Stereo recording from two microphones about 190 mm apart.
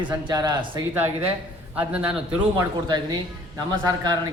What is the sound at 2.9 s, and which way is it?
Speech, 20° right (ahead or behind).